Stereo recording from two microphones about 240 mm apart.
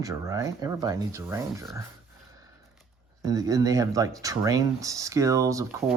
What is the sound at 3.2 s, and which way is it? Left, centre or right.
Speech, centre.